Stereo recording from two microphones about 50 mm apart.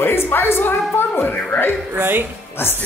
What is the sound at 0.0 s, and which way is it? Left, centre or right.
A woman's voice, left.